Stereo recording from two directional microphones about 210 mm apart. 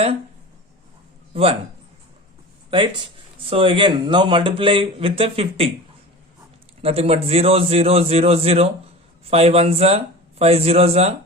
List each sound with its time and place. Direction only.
1.3 s speech: 25° right (ahead or behind)
2.6 s a man's voice: 25° right (ahead or behind)
6.8 s a man's voice: 30° right (ahead or behind)